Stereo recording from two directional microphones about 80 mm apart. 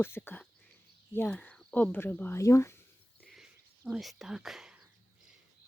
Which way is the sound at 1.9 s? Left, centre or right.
Left.